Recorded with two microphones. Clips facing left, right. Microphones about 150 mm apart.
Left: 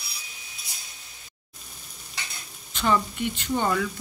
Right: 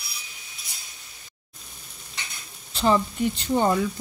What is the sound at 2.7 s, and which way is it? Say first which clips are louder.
Speech: right 3 dB; 35° right (ahead or behind).